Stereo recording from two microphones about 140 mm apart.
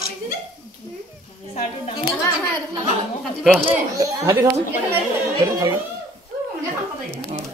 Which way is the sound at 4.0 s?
25° right (ahead or behind).